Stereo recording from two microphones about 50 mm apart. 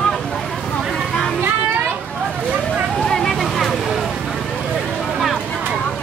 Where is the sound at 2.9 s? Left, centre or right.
Centre.